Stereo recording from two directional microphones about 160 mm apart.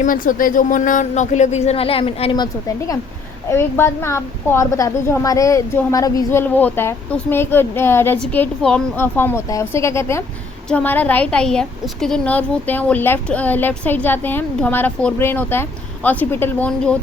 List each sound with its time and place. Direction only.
0.0 s speech: 60° left (ahead or behind); by 2.3 s 40° left (ahead or behind)
2.3 s a woman's voice: 25° left (ahead or behind); by 17.0 s 10° left (ahead or behind)